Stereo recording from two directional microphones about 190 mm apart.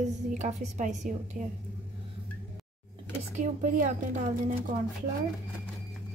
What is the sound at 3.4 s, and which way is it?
Speech, 40° right (ahead or behind).